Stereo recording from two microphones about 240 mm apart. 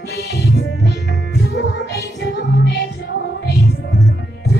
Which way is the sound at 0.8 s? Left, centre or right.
Left.